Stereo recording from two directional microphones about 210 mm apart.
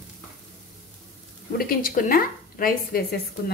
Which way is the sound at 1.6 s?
45° left (ahead or behind).